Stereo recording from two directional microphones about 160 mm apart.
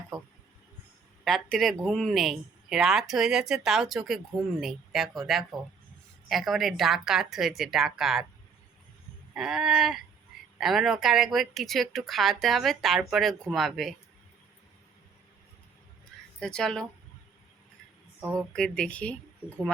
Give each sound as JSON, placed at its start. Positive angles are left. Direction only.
{"t": 1.2, "sound": "speech", "side_deg": 0}
{"t": 9.3, "sound": "speech", "side_deg": -5}
{"t": 16.4, "sound": "speech", "side_deg": 5}
{"t": 18.3, "sound": "speech", "side_deg": 5}